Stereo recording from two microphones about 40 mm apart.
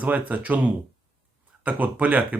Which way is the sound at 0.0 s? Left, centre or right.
Right.